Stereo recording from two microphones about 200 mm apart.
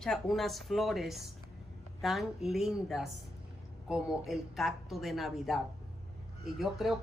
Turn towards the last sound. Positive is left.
turn(degrees=0)  # may be behind; listen again after turning